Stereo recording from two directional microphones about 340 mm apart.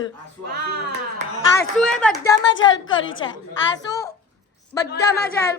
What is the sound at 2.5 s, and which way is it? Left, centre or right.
Speech, left.